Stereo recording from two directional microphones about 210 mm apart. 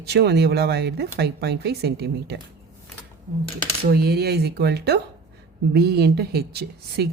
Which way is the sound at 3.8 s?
45° right (ahead or behind).